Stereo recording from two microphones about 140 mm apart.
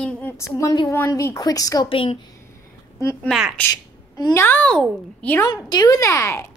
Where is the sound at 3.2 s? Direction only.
5° right (ahead or behind).